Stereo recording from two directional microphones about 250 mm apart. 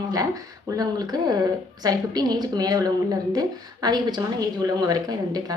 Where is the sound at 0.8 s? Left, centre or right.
Centre.